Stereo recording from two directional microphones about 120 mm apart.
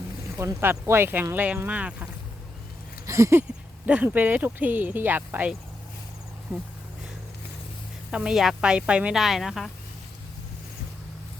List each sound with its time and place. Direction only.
0.3 s speech: 20° right (ahead or behind)
3.1 s a sound: 25° right (ahead or behind)
3.8 s speech: 10° right (ahead or behind)
8.1 s speech: 5° right (ahead or behind)